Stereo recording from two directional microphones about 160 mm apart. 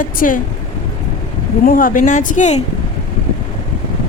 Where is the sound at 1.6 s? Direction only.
60° left (ahead or behind).